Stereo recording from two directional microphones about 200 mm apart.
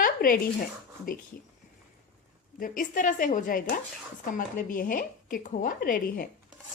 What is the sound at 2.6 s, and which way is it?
Speech, 40° left (ahead or behind).